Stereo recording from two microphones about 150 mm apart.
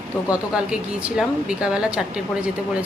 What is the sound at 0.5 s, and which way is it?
Speech, 5° right (ahead or behind).